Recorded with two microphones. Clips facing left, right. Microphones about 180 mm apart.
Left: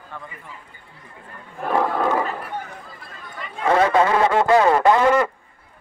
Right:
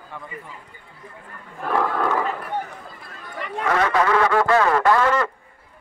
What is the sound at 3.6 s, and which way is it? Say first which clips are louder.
Speech: left 3 dB; 25° left (ahead or behind).